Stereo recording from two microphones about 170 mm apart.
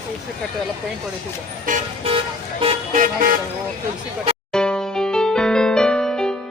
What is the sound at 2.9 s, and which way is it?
Vehicle, 50° right (ahead or behind).